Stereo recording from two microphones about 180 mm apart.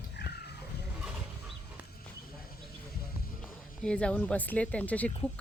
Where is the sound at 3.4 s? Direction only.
5° left (ahead or behind).